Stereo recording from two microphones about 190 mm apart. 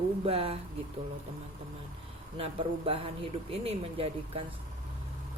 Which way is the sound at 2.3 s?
30° right (ahead or behind).